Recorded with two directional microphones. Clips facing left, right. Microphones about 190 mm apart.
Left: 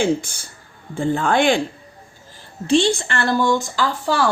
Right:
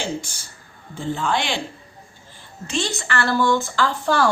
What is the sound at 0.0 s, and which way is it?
A man's voice, 55° left (ahead or behind).